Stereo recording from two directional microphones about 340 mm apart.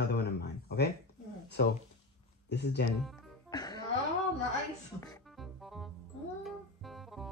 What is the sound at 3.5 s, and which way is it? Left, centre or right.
Music, centre.